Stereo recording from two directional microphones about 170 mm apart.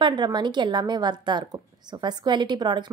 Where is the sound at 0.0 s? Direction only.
25° right (ahead or behind).